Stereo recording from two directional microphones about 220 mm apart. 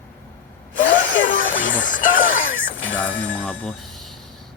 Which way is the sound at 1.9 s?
35° left (ahead or behind).